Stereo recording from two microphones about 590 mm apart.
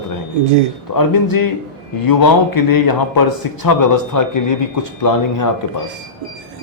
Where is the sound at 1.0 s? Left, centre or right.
Left.